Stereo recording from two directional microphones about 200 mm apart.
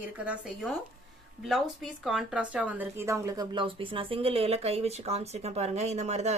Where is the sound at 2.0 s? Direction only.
Centre (ahead or behind); by 6.3 s 35° right (ahead or behind).